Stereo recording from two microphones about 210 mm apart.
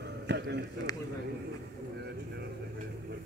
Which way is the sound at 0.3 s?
55° right (ahead or behind).